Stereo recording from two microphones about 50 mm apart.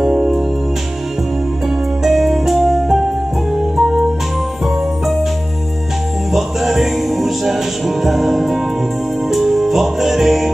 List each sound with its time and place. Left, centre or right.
0.0 s music: centre
2.0 s music: centre
6.3 s music: centre